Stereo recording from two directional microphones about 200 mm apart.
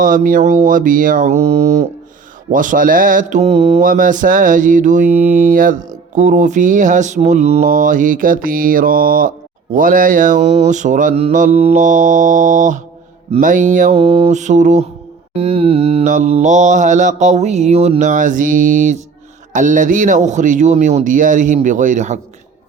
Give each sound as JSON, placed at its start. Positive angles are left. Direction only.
{"t": 0.0, "sound": "mantra", "side_deg": -40}
{"t": 5.0, "sound": "speech", "side_deg": -10}
{"t": 5.4, "sound": "mantra", "side_deg": -45}